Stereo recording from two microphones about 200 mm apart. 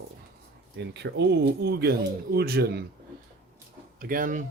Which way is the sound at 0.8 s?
60° right (ahead or behind).